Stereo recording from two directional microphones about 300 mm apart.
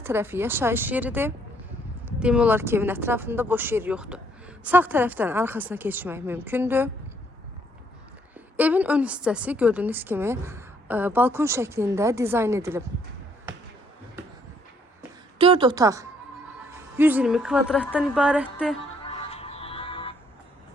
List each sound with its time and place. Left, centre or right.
0.0 s a woman's voice: centre
8.5 s a woman's voice: centre
15.4 s a woman's voice: centre
19.1 s music: centre